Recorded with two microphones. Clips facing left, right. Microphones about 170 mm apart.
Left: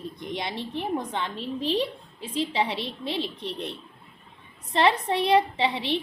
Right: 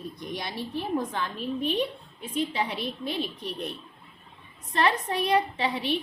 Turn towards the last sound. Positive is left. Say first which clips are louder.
# left 2 dB
turn(degrees=25)  # may be behind; listen again after turning